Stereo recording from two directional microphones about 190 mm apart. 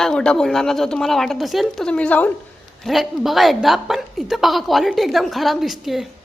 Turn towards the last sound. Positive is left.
turn(degrees=0)  # may be behind; listen again after turning